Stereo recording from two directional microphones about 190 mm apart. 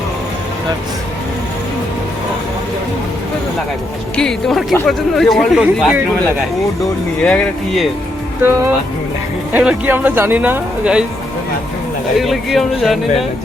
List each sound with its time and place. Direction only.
4.2 s speech: centre (ahead or behind)
7.3 s speech: 5° left (ahead or behind)
8.4 s speech: 10° right (ahead or behind)
12.1 s speech: centre (ahead or behind)